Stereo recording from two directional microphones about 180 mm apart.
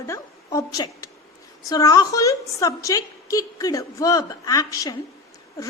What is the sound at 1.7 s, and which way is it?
A woman's voice, 20° left (ahead or behind).